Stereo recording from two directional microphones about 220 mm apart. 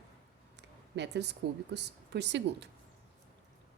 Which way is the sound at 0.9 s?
50° right (ahead or behind).